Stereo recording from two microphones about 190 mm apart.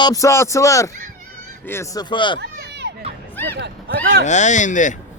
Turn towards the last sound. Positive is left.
turn(degrees=40)  # may be behind; listen again after turning